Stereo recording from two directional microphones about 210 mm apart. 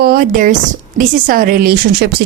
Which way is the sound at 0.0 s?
45° right (ahead or behind).